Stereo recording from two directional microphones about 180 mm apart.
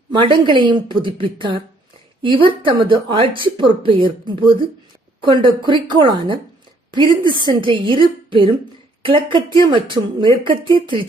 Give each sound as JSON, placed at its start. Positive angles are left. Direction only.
{"t": 0.1, "sound": "speech", "side_deg": -25}